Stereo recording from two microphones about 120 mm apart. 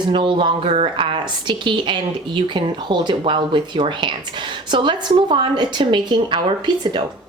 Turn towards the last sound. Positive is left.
turn(degrees=-35)  # may be behind; listen again after turning